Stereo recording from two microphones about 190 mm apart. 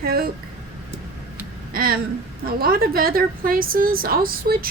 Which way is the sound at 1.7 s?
50° right (ahead or behind).